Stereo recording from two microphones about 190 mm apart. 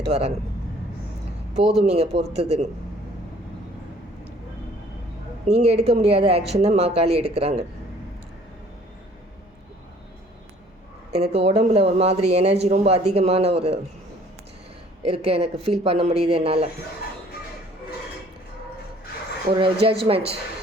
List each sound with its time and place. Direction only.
0.0 s speech: 35° right (ahead or behind)
1.8 s speech: 30° right (ahead or behind)
5.5 s speech: 35° right (ahead or behind)
11.1 s speech: 35° right (ahead or behind)
15.0 s speech: 30° right (ahead or behind)
19.5 s speech: 25° right (ahead or behind)